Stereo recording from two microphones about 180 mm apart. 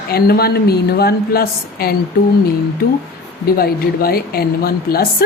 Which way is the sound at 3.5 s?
55° left (ahead or behind).